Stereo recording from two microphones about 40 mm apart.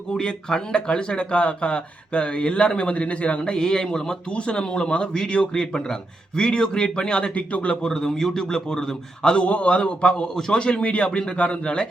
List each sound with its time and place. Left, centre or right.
0.1 s speech: centre
7.9 s a man's voice: centre
9.3 s speech: left; by 10.6 s centre
10.6 s speech: left